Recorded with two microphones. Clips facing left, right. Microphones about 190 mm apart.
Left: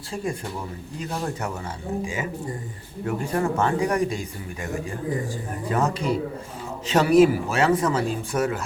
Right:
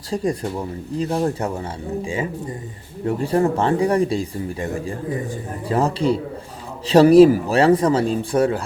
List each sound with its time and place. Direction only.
0.9 s speech: 35° right (ahead or behind)